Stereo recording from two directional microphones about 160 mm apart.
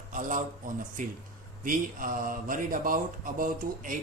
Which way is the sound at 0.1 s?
55° right (ahead or behind).